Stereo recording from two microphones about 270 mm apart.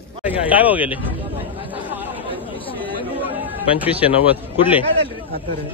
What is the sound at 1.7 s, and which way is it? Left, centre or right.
Chatter, centre.